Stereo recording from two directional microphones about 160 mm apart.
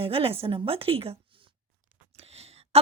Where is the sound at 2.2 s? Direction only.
40° right (ahead or behind).